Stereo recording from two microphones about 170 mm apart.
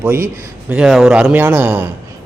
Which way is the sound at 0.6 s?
5° right (ahead or behind).